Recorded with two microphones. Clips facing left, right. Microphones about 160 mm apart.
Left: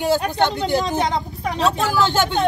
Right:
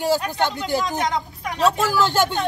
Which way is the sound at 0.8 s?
30° left (ahead or behind).